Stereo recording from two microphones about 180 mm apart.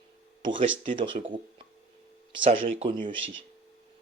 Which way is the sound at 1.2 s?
45° right (ahead or behind).